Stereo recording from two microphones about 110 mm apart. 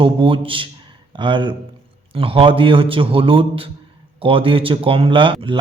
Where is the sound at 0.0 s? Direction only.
55° right (ahead or behind).